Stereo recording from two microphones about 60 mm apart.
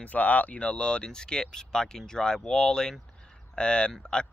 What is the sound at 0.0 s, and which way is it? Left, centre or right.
Speech, left.